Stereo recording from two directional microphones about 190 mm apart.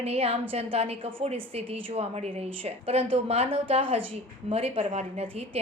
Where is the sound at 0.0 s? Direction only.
30° right (ahead or behind).